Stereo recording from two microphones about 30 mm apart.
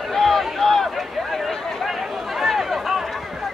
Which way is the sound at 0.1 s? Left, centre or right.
Centre.